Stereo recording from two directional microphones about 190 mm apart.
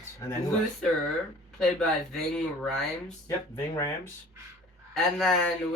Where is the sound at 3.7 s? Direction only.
15° left (ahead or behind).